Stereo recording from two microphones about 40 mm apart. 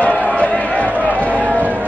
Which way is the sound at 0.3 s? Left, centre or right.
Left.